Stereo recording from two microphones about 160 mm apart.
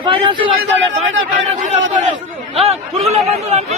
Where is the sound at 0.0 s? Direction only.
35° right (ahead or behind).